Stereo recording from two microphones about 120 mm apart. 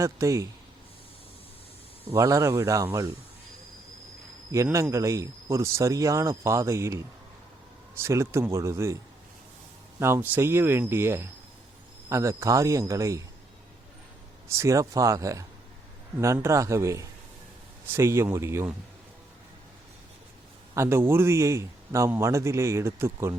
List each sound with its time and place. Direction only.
0.0 s a man's voice: 25° right (ahead or behind)
2.1 s a man's voice: 25° right (ahead or behind)
4.5 s a man's voice: 25° right (ahead or behind)
10.0 s a man's voice: 20° right (ahead or behind)
14.4 s a man's voice: 25° right (ahead or behind)
20.7 s a man's voice: 20° right (ahead or behind)